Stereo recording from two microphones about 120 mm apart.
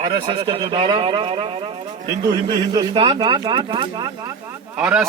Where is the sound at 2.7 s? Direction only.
45° right (ahead or behind).